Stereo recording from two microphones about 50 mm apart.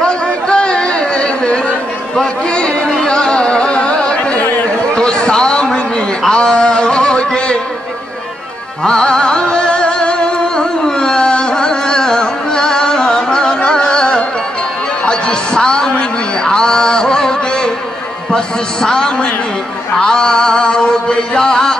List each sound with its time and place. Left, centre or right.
0.0 s chatter: centre
2.1 s a man's voice: centre
2.9 s carnatic music: centre
4.9 s a sound: centre
8.8 s music: centre
18.3 s a man's voice: centre
20.0 s chant: centre